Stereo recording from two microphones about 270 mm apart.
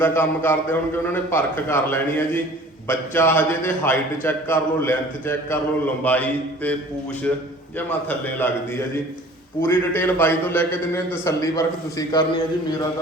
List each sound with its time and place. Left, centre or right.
0.0 s a man's voice: centre
6.0 s mantra: centre
7.9 s a man's voice: centre
9.6 s a man's voice: centre